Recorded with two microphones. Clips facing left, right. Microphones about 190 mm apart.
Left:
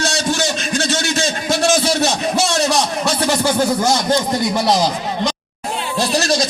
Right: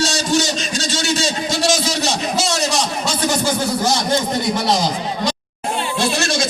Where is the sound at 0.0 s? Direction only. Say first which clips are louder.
Right 1 dB; 55° left (ahead or behind).